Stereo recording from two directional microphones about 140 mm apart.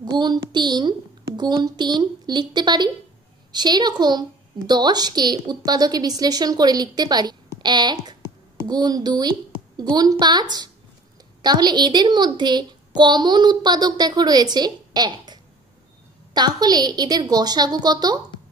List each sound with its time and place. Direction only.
0.0 s a woman's voice: 30° right (ahead or behind)
16.3 s a woman's voice: 30° right (ahead or behind)